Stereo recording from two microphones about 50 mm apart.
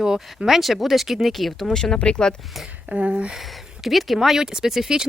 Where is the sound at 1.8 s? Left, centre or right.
Centre.